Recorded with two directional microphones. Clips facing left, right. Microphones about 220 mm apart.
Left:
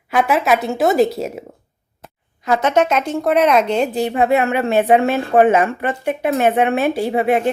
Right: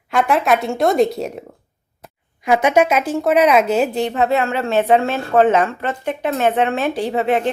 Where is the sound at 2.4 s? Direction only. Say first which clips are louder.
Right 1 dB; 10° right (ahead or behind).